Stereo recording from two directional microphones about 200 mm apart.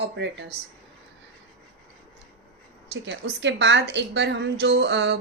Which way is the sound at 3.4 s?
60° right (ahead or behind).